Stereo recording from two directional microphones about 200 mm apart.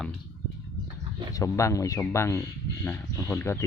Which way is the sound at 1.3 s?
15° left (ahead or behind).